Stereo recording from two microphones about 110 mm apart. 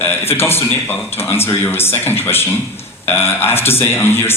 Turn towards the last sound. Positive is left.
turn(degrees=20)  # may be behind; listen again after turning